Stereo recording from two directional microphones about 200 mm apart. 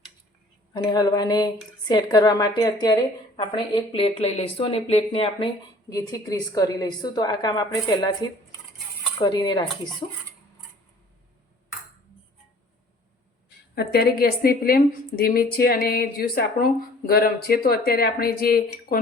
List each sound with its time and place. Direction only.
0.7 s a woman's voice: 20° left (ahead or behind)
5.9 s a woman's voice: 15° left (ahead or behind)
13.7 s a woman's voice: 50° left (ahead or behind)